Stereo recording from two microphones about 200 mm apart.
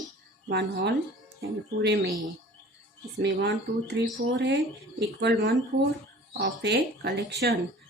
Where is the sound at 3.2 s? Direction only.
55° right (ahead or behind).